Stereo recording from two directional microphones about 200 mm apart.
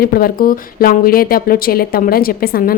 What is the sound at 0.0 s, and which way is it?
Speech, 50° left (ahead or behind).